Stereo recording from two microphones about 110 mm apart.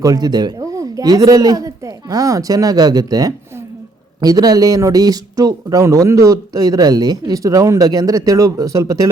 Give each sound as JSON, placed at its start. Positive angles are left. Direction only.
{"t": 0.0, "sound": "a man's voice", "side_deg": -35}